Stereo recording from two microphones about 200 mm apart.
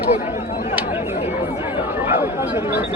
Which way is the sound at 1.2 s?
30° left (ahead or behind).